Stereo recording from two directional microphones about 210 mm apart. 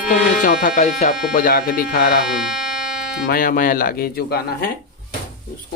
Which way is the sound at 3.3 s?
40° left (ahead or behind).